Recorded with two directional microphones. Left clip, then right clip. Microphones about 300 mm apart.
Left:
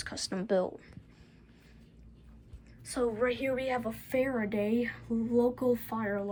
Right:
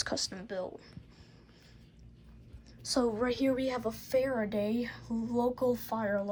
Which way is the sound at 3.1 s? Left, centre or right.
Centre.